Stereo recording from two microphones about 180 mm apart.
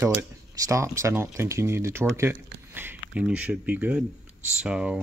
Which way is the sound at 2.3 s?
90° right.